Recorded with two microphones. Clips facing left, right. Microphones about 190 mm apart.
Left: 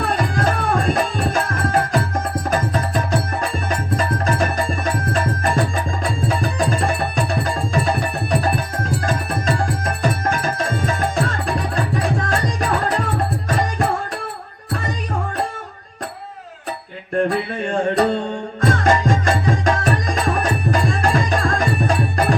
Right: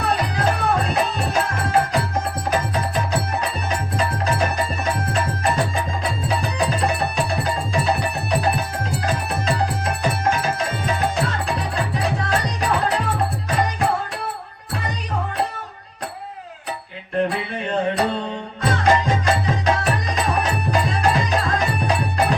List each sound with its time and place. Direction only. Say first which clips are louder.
0.0 s music: left 1 dB; 45° left (ahead or behind)
17.2 s music: left 3 dB; 45° left (ahead or behind)